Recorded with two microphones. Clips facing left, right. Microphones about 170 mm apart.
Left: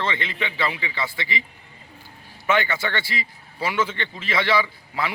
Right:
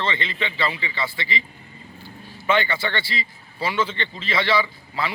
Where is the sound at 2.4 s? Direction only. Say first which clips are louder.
Right 1 dB; 10° left (ahead or behind).